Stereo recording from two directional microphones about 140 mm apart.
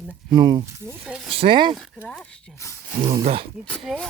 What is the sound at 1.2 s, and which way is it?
Speech, 40° right (ahead or behind).